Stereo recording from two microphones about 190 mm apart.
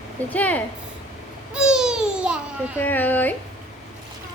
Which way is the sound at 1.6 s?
5° right (ahead or behind).